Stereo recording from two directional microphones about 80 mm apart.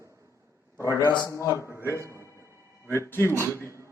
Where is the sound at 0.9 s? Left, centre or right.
Right.